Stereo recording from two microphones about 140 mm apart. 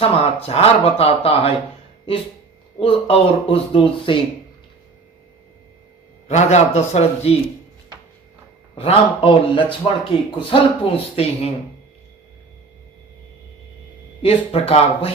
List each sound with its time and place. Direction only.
0.0 s speech: 45° left (ahead or behind)
2.7 s speech: 40° left (ahead or behind)
6.2 s speech: 50° left (ahead or behind)
8.8 s speech: 40° left (ahead or behind)
11.1 s speech: 45° left (ahead or behind)
14.2 s speech: 45° left (ahead or behind)